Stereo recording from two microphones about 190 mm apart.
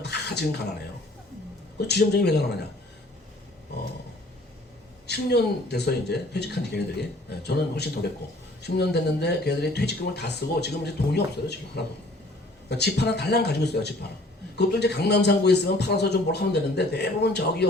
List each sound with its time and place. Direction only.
0.0 s a sound: 60° left (ahead or behind)
1.9 s speech: 60° left (ahead or behind)
5.0 s speech: 60° left (ahead or behind)